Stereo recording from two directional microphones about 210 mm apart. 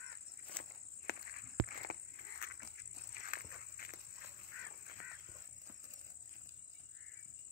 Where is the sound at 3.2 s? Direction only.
45° left (ahead or behind).